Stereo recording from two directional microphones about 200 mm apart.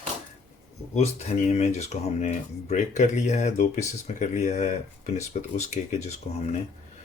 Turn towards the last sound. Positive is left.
turn(degrees=35)  # may be behind; listen again after turning